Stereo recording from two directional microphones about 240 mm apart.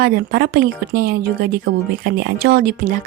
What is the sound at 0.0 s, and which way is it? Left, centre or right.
A woman's voice, right.